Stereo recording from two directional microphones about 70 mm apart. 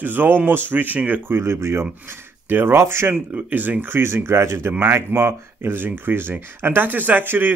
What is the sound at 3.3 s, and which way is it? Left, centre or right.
Speech, right.